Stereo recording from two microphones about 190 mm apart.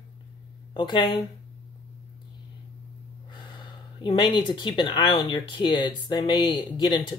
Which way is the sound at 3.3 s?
25° left (ahead or behind).